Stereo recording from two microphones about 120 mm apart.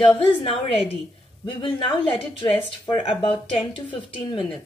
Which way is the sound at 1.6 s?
50° left (ahead or behind).